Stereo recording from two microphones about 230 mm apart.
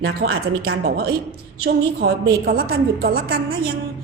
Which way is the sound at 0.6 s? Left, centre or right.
Right.